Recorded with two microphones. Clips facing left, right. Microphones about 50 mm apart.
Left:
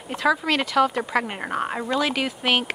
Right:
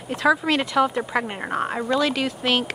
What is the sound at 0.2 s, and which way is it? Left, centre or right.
A woman's voice, centre.